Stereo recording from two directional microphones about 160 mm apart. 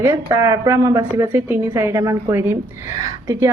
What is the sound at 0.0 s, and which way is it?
A woman's voice, 20° right (ahead or behind).